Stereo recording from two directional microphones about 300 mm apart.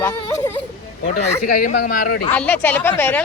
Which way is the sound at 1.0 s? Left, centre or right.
Left.